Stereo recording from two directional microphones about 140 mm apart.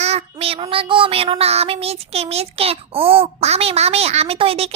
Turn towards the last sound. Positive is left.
turn(degrees=-45)  # may be behind; listen again after turning